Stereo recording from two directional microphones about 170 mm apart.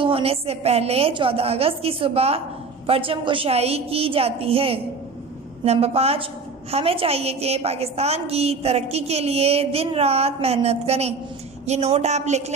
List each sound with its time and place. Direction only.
0.0 s a woman's voice: 35° right (ahead or behind)